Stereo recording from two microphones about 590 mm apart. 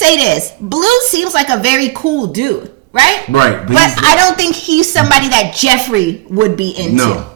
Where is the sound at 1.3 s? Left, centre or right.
Right.